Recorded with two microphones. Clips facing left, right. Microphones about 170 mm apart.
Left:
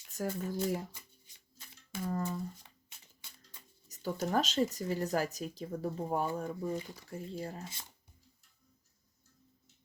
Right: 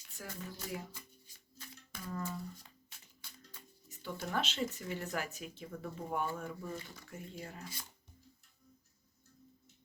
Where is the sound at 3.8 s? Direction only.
40° left (ahead or behind); by 7.9 s 25° left (ahead or behind).